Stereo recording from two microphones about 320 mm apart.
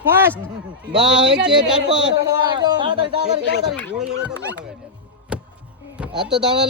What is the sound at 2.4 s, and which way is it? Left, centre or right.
Speech, centre.